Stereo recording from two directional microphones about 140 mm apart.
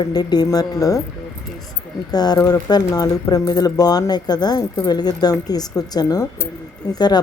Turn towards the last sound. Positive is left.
turn(degrees=30)  # may be behind; listen again after turning